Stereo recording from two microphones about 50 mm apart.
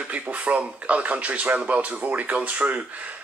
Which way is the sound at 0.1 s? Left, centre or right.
Right.